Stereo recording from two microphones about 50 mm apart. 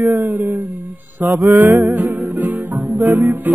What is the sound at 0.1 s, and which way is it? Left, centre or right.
Music, right.